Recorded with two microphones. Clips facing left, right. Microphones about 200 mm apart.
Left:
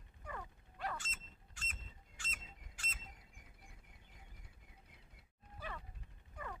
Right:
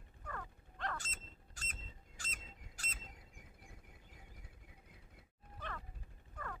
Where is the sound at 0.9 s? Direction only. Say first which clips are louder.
Right 1 dB; 40° right (ahead or behind).